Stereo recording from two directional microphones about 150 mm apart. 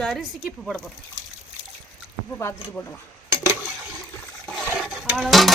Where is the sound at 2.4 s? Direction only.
15° left (ahead or behind).